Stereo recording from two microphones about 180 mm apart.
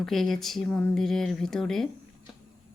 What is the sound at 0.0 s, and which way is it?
Speech, centre (ahead or behind).